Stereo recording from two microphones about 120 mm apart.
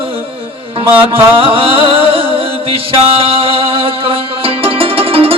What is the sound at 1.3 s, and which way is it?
Music, 50° right (ahead or behind).